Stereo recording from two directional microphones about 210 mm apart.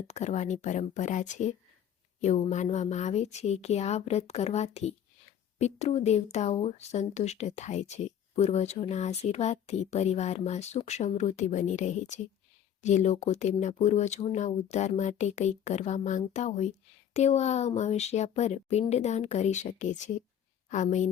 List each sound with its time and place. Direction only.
0.1 s a woman's voice: 35° left (ahead or behind)